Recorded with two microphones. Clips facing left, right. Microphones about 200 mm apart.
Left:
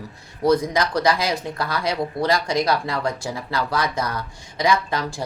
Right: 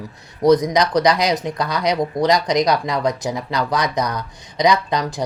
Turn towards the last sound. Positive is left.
turn(degrees=-20)  # may be behind; listen again after turning